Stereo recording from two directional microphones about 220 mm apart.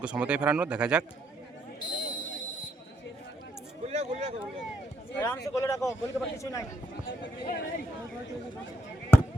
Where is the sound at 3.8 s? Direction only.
30° right (ahead or behind).